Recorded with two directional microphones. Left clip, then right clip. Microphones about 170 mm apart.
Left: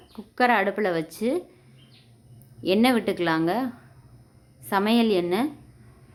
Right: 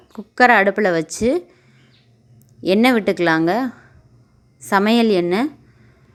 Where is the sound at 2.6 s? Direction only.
30° right (ahead or behind).